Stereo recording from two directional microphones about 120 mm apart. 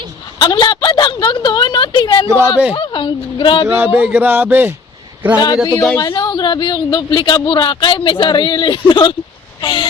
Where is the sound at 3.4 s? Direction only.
40° left (ahead or behind).